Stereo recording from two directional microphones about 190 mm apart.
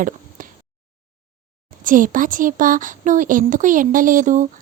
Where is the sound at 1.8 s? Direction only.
45° right (ahead or behind).